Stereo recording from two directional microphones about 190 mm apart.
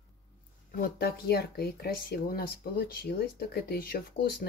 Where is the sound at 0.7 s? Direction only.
50° left (ahead or behind).